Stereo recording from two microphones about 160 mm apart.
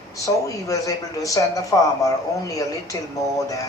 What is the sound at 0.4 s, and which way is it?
A woman's voice, 20° left (ahead or behind).